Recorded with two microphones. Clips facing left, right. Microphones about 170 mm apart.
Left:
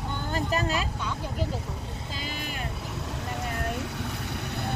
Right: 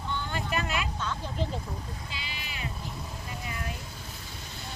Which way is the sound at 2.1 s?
45° left (ahead or behind).